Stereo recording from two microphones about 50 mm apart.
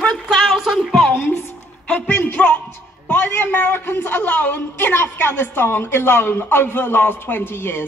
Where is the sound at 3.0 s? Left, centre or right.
Left.